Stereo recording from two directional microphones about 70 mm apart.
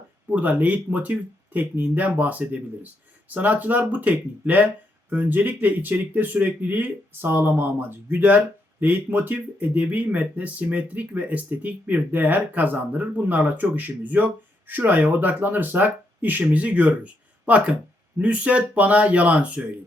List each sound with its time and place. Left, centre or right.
0.3 s speech: right